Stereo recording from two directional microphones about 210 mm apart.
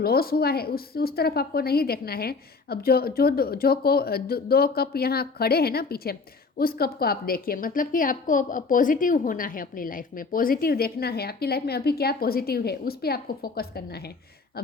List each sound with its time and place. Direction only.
0.0 s a woman's voice: 45° left (ahead or behind)